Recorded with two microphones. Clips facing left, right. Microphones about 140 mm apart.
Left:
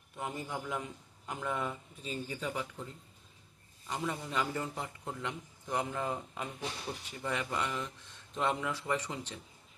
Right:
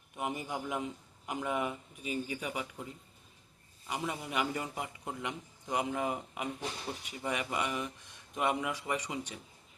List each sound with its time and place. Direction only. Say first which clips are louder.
0.2 s a man's voice: right 2 dB; 20° right (ahead or behind)
3.8 s a man's voice: even; 15° right (ahead or behind)